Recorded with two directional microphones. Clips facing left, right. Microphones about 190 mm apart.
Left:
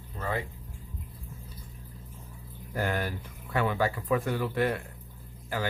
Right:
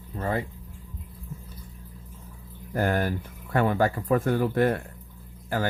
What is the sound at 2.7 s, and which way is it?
Speech, 45° right (ahead or behind).